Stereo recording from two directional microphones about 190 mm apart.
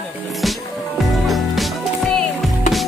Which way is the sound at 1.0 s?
Centre (ahead or behind).